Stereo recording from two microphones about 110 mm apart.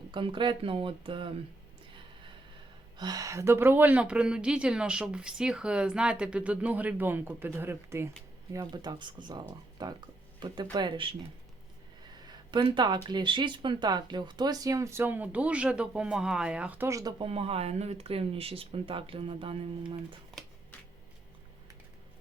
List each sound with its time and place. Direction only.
0.1 s speech: 50° right (ahead or behind)
3.0 s a woman's voice: 35° right (ahead or behind)
8.7 s speech: 40° right (ahead or behind)
12.2 s speech: 40° right (ahead or behind); by 16.9 s 15° right (ahead or behind)
16.9 s speech: 35° right (ahead or behind)
17.2 s speech: 60° right (ahead or behind)